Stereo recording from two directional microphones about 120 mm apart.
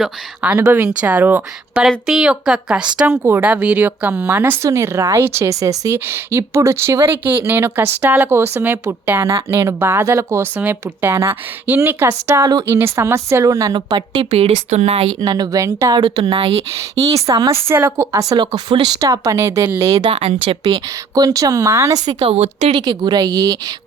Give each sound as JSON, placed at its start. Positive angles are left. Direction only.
{"t": 0.0, "sound": "a woman's voice", "side_deg": -10}
{"t": 14.3, "sound": "speech", "side_deg": -60}
{"t": 15.2, "sound": "a woman's voice", "side_deg": -35}